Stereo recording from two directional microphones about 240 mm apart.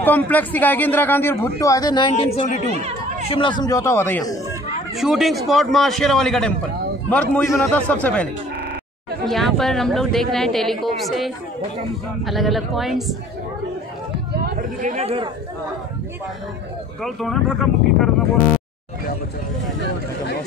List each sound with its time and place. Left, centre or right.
0.0 s a man's voice: centre
2.1 s speech: left
2.6 s chatter: right
3.3 s a man's voice: left
4.9 s a man's voice: centre
14.4 s speech: right
17.0 s speech: centre